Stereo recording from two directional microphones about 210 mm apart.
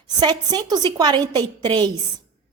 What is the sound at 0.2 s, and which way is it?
A woman's voice, 20° right (ahead or behind).